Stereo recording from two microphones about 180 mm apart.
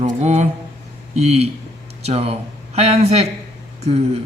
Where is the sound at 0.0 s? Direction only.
35° right (ahead or behind).